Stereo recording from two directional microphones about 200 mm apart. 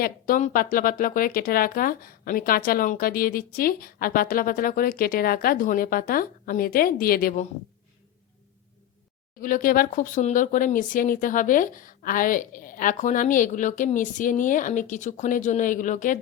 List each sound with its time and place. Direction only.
0.0 s speech: 40° left (ahead or behind)
9.4 s speech: 45° left (ahead or behind)